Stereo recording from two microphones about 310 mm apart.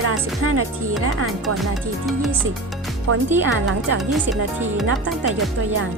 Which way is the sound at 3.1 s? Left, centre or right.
Right.